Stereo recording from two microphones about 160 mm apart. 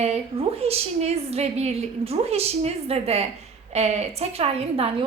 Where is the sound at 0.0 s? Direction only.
40° right (ahead or behind).